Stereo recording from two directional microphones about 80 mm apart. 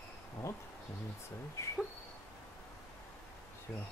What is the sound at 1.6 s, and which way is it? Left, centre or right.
Speech, left.